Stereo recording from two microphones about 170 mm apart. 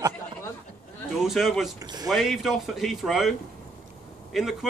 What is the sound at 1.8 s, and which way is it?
Speech, 25° right (ahead or behind).